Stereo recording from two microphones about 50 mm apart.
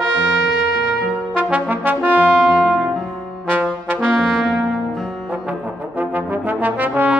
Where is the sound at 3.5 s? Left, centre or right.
Right.